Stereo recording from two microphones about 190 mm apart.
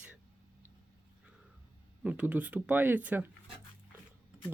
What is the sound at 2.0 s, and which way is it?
Speech, 10° right (ahead or behind).